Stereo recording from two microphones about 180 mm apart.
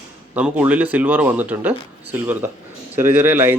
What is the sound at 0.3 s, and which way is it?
Speech, 10° right (ahead or behind).